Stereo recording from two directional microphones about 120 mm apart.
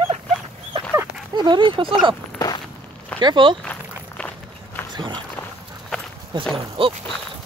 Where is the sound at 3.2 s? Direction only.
40° right (ahead or behind).